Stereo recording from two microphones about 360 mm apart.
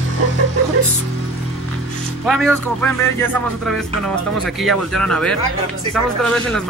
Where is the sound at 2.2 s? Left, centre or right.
Centre.